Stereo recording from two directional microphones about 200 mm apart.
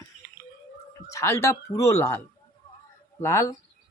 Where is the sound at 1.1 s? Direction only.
15° left (ahead or behind).